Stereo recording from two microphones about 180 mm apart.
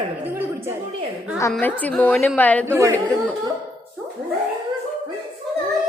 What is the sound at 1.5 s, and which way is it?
A woman's voice, 10° left (ahead or behind).